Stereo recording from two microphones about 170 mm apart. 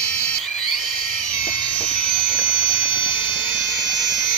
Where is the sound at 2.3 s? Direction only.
30° left (ahead or behind).